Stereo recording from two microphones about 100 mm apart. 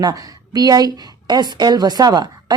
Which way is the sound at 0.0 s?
40° right (ahead or behind).